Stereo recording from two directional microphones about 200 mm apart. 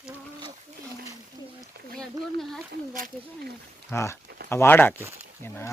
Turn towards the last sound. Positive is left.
turn(degrees=10)  # may be behind; listen again after turning